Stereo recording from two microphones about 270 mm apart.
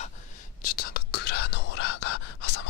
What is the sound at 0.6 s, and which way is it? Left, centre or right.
Whispering, left.